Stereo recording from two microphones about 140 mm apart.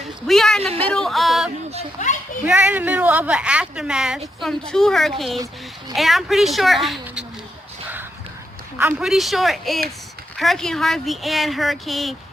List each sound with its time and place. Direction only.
0.3 s speech: 5° left (ahead or behind)
0.9 s music: centre (ahead or behind)
2.5 s speech: 10° right (ahead or behind)
8.8 s speech: 15° right (ahead or behind)
9.0 s speech: centre (ahead or behind)